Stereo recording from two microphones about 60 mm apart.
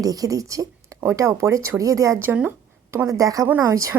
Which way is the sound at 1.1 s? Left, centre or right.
Right.